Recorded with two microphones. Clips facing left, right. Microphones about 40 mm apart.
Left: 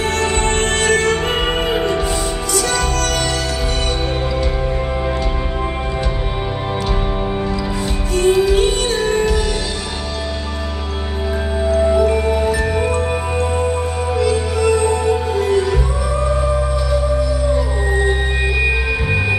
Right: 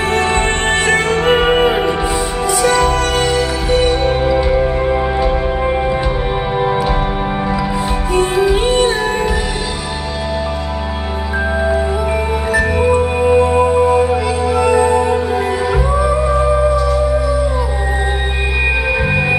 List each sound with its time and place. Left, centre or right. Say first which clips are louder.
0.1 s music: right 3 dB; centre
8.2 s music: left 1 dB; centre
11.8 s music: left 3 dB; centre
18.6 s music: right 6 dB; right